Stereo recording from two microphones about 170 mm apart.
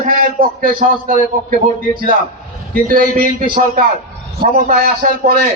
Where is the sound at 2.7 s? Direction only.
55° right (ahead or behind).